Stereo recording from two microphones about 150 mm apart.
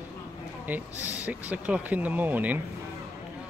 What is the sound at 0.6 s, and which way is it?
Speech, 10° right (ahead or behind).